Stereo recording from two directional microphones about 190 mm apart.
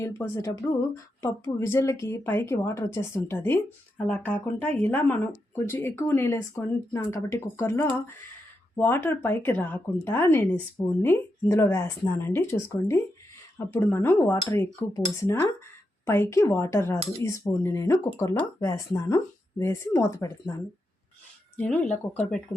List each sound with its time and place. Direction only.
0.0 s speech: 15° left (ahead or behind)
21.5 s speech: 10° left (ahead or behind)